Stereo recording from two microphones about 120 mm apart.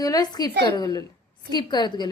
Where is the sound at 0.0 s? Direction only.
35° left (ahead or behind).